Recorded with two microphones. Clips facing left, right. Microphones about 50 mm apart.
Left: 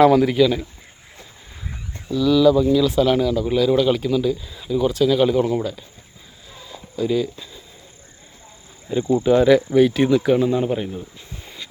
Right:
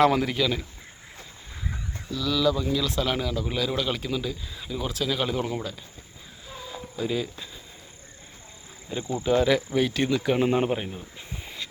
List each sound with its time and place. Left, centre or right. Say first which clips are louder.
0.0 s speech: left 8 dB; centre
2.0 s speech: left 10 dB; centre
6.5 s a sound: right 2 dB; centre
8.9 s speech: left 8 dB; centre
10.4 s speech: left 3 dB; right
11.4 s vehicle: even; centre